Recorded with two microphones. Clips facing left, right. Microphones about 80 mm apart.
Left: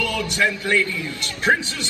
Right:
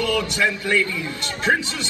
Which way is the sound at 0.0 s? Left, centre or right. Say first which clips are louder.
Right 1 dB; right.